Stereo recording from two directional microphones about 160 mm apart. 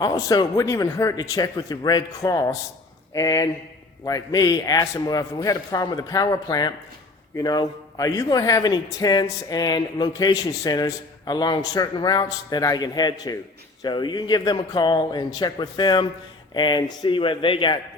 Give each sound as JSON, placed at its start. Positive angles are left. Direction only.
{"t": 0.0, "sound": "speech", "side_deg": 25}